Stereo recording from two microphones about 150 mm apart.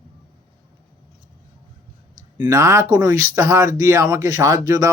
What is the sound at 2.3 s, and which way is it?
Speech, 25° right (ahead or behind).